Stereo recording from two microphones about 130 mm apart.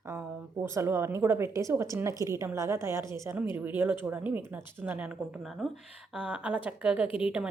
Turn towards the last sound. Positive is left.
turn(degrees=-5)  # may be behind; listen again after turning